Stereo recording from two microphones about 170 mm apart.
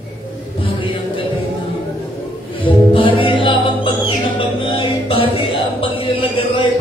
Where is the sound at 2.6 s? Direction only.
30° left (ahead or behind).